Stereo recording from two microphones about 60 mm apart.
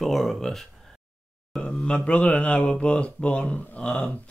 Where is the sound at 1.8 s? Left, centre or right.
Centre.